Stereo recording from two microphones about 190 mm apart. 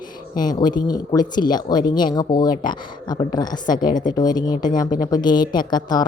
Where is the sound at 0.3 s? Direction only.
20° left (ahead or behind).